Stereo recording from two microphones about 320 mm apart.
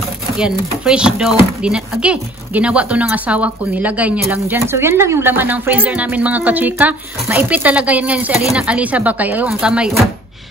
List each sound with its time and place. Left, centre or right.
0.4 s speech: centre